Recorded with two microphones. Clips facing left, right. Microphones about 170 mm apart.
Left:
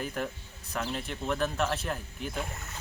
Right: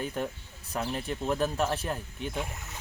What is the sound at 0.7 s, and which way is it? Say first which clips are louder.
Speech: right 2 dB; 30° right (ahead or behind).